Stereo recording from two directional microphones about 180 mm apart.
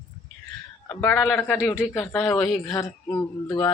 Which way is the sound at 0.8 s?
10° left (ahead or behind).